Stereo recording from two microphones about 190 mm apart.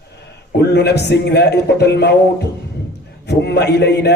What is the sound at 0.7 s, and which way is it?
A man's voice, 60° left (ahead or behind).